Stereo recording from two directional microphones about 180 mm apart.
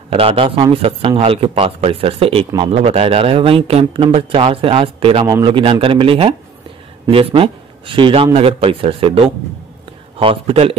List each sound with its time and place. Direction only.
0.1 s a man's voice: 30° right (ahead or behind)